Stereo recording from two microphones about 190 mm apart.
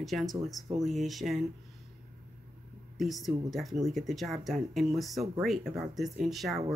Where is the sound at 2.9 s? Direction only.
Centre (ahead or behind).